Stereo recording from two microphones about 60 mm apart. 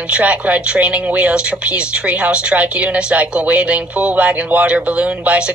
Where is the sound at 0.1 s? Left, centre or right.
Right.